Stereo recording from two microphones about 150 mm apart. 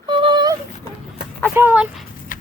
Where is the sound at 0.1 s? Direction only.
30° right (ahead or behind).